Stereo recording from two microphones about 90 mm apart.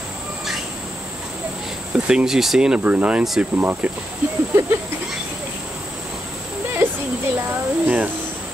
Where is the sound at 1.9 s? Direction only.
10° right (ahead or behind).